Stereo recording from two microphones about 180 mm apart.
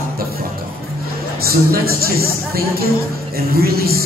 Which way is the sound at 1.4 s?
55° right (ahead or behind).